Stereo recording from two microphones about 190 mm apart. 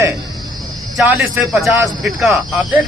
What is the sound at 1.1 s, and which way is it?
Speech, centre (ahead or behind).